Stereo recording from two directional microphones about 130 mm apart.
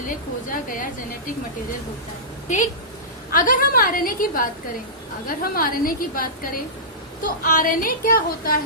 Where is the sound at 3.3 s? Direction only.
90° left.